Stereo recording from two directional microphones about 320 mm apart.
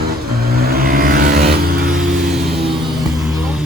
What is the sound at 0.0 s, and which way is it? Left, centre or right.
Vehicle, right.